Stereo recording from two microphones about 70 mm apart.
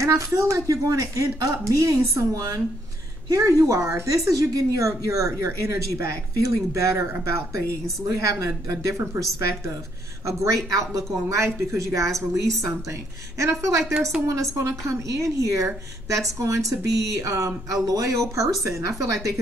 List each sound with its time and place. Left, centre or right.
0.0 s a woman's voice: right
10.2 s a woman's voice: right